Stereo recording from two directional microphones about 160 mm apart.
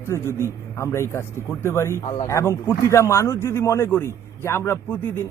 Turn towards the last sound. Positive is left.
turn(degrees=10)  # may be behind; listen again after turning